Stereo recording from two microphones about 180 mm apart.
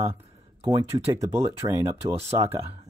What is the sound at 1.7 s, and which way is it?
Speech, 15° right (ahead or behind).